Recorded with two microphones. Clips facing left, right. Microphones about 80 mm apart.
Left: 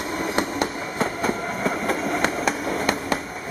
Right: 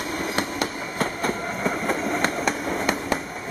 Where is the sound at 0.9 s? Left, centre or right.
Centre.